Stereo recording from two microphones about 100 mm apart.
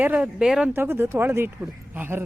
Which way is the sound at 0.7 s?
20° right (ahead or behind).